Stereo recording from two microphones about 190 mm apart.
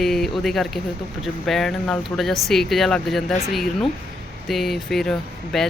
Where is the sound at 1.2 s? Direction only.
Centre (ahead or behind).